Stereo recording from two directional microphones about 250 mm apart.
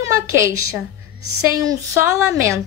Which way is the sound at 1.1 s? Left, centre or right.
Right.